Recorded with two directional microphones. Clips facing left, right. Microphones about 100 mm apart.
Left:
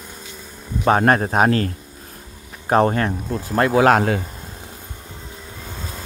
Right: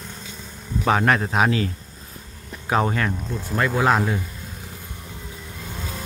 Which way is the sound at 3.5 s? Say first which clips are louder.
Left 5 dB; 60° left (ahead or behind).